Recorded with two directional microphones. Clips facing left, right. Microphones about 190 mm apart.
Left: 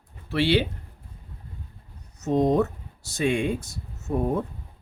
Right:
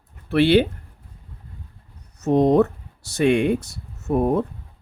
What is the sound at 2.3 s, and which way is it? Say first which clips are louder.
Speech: right 5 dB; 65° right (ahead or behind).